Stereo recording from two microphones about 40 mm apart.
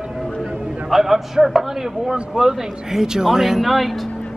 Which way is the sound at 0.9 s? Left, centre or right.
Centre.